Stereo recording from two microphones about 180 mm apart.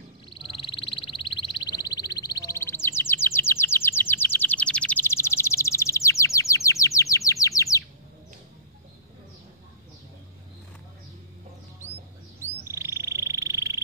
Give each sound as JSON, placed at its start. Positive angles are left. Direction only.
{"t": 0.3, "sound": "frog", "side_deg": 30}
{"t": 12.6, "sound": "frog", "side_deg": -15}